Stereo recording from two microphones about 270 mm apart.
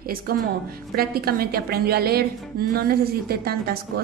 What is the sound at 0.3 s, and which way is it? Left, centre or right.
A woman's voice, right.